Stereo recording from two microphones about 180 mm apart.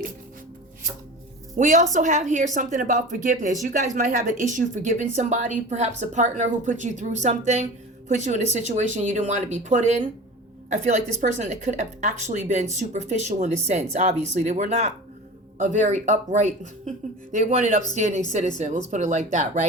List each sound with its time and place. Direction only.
1.5 s a woman's voice: 45° right (ahead or behind)